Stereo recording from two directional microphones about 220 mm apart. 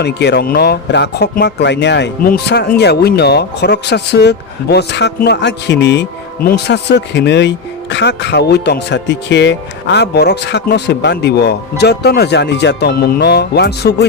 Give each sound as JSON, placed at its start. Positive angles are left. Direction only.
{"t": 0.0, "sound": "speech", "side_deg": 50}